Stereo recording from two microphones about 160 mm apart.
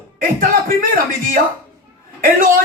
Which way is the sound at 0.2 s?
60° right (ahead or behind).